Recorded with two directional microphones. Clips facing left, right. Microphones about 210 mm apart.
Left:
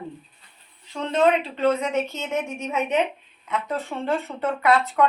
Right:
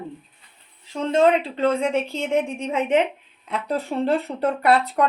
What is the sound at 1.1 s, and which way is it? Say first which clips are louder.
Speech: right 2 dB; 30° right (ahead or behind).